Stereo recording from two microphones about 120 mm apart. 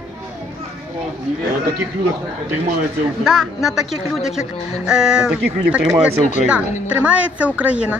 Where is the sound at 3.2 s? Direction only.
5° right (ahead or behind).